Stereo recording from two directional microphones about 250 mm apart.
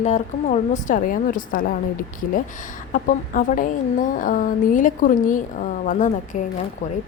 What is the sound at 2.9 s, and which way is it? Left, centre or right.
A woman's voice, left.